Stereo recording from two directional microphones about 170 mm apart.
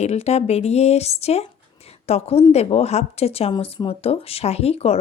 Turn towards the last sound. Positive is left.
turn(degrees=35)  # may be behind; listen again after turning